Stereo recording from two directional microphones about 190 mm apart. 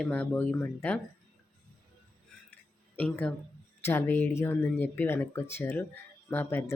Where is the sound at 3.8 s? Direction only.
10° left (ahead or behind).